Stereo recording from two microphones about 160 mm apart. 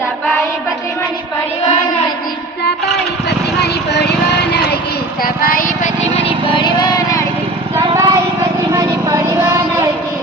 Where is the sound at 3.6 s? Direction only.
90° left.